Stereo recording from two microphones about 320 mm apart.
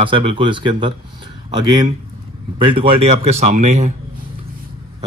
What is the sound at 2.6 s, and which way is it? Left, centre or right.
Speech, centre.